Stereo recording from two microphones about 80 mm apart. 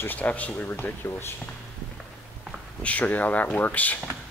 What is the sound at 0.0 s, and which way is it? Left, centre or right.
Speech, left.